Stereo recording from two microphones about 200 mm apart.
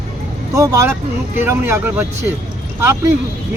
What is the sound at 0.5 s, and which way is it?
Speech, 15° right (ahead or behind).